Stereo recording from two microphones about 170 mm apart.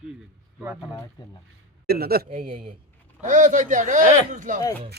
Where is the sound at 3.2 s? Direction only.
50° right (ahead or behind).